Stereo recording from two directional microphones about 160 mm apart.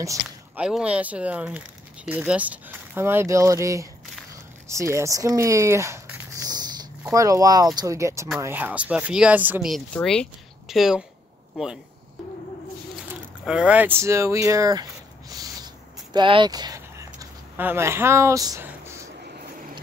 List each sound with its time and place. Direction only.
0.6 s speech: 5° right (ahead or behind)
9.9 s speech: 5° left (ahead or behind)
13.5 s a sound: 5° right (ahead or behind)